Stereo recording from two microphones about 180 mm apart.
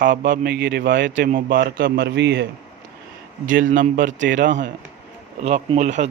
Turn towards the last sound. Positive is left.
turn(degrees=-40)  # may be behind; listen again after turning